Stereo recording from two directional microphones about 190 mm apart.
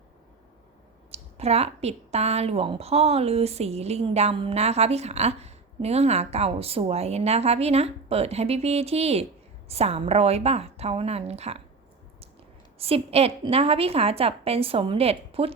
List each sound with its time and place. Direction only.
1.1 s a woman's voice: 35° right (ahead or behind)
12.8 s a woman's voice: 30° right (ahead or behind)